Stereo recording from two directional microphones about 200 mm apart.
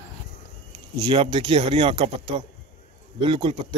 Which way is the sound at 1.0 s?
25° right (ahead or behind).